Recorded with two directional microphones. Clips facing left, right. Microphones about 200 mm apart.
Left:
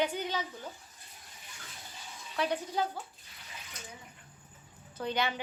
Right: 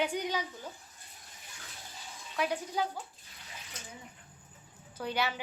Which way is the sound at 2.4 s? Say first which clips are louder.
Left 1 dB; 10° right (ahead or behind).